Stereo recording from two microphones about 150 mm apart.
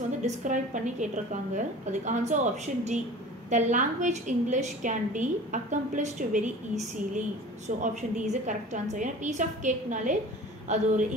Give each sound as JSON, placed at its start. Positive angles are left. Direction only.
{"t": 0.2, "sound": "a woman's voice", "side_deg": -55}